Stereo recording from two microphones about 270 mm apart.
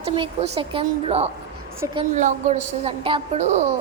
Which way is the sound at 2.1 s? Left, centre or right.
Right.